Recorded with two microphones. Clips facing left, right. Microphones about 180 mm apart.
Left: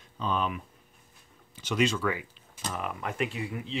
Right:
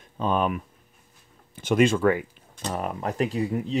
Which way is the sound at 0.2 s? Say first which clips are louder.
Right 6 dB; 50° right (ahead or behind).